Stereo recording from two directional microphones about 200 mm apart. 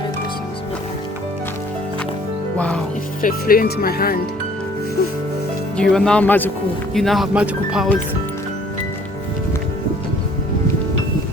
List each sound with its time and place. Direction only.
2.6 s music: 5° left (ahead or behind)
3.2 s speech: 45° left (ahead or behind)
5.7 s speech: 5° left (ahead or behind)